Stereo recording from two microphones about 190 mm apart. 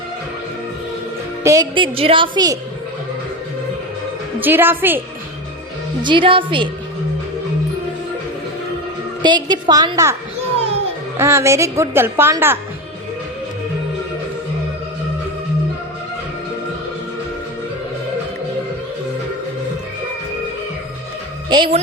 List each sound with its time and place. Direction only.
1.5 s a woman's voice: 20° right (ahead or behind)
4.4 s a woman's voice: 10° right (ahead or behind)
6.0 s a woman's voice: 25° right (ahead or behind)
9.2 s a woman's voice: 25° right (ahead or behind)
11.2 s a woman's voice: 15° right (ahead or behind)
21.5 s speech: 25° right (ahead or behind)